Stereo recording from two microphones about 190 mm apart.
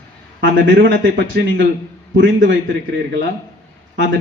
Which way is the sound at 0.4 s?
70° right (ahead or behind).